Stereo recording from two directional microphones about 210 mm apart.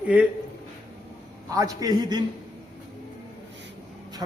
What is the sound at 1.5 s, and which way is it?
Speech, 15° right (ahead or behind).